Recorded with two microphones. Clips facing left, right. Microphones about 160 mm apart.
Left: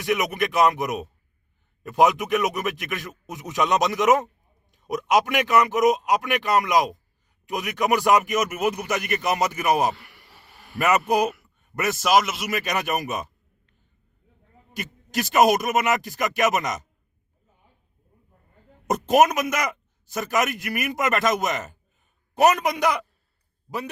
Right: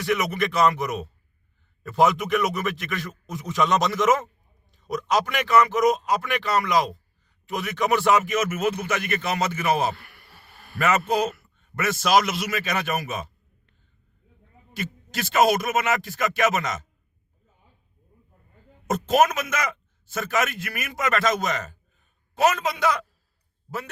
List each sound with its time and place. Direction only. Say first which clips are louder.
0.0 s a man's voice: even; 15° left (ahead or behind)
14.7 s a man's voice: right 1 dB; 15° left (ahead or behind)
18.9 s a man's voice: left 2 dB; 15° left (ahead or behind)